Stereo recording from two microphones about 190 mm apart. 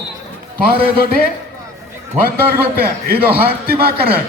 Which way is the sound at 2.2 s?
55° right (ahead or behind).